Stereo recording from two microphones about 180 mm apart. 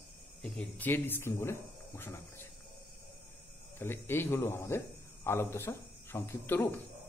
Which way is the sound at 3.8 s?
10° left (ahead or behind).